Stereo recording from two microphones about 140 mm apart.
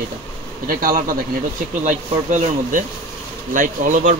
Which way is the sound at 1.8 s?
65° right (ahead or behind).